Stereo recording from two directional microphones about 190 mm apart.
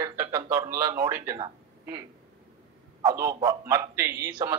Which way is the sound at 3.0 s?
15° right (ahead or behind).